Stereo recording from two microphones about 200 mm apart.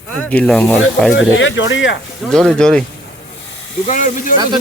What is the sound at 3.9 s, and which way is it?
Speech, 40° left (ahead or behind).